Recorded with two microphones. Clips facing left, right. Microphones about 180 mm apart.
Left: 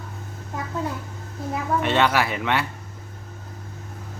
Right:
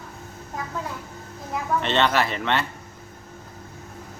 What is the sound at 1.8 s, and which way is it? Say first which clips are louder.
Speech: left 1 dB; 10° left (ahead or behind).